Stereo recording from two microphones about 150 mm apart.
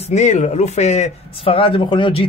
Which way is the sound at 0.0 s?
50° left (ahead or behind).